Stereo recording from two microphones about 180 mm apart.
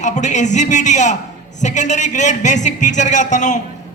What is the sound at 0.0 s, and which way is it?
A man's voice, 40° left (ahead or behind).